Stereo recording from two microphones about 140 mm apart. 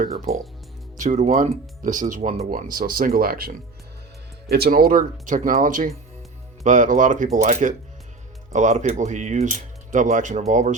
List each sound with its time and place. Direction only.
0.9 s speech: 60° right (ahead or behind)
1.8 s speech: 65° right (ahead or behind)
2.5 s speech: 90° right
4.6 s speech: 90° right; by 10.8 s 60° right (ahead or behind)